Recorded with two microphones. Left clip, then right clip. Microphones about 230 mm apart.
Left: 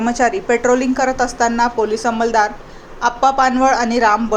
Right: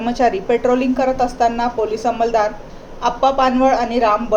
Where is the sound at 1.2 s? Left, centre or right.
Left.